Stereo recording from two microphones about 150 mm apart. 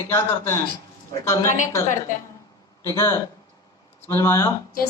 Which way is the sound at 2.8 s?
20° left (ahead or behind).